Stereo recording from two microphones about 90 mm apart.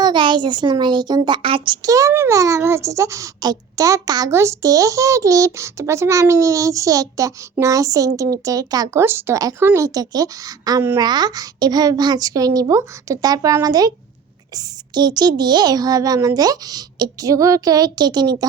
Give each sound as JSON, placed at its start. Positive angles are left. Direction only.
{"t": 0.0, "sound": "a child's voice", "side_deg": -60}
{"t": 1.4, "sound": "a child's voice", "side_deg": -75}
{"t": 1.8, "sound": "a child's voice", "side_deg": -40}
{"t": 4.3, "sound": "a child's voice", "side_deg": -30}
{"t": 8.9, "sound": "a child's voice", "side_deg": -30}